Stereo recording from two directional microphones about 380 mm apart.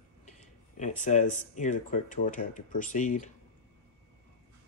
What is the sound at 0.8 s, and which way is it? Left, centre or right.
Speech, centre.